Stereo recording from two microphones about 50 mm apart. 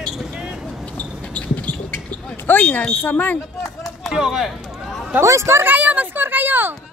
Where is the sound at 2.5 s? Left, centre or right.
Left.